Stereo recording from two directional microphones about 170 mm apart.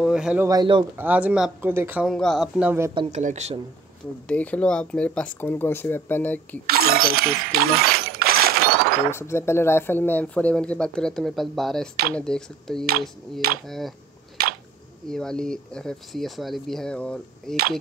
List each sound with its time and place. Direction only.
0.0 s speech: 5° right (ahead or behind)
0.5 s speech: 25° right (ahead or behind)
0.9 s speech: 10° right (ahead or behind)
2.1 s speech: centre (ahead or behind)
2.9 s speech: 30° right (ahead or behind)
3.2 s speech: 45° right (ahead or behind)
4.3 s speech: 10° left (ahead or behind)
6.7 s a sound: 60° right (ahead or behind)
9.1 s speech: 15° left (ahead or behind)
15.0 s speech: 5° left (ahead or behind)